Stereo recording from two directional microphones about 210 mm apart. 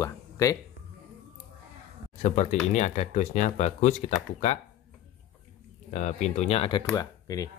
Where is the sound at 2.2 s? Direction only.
35° left (ahead or behind).